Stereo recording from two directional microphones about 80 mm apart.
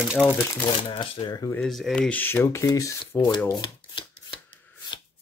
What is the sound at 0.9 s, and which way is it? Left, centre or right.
Speech, left.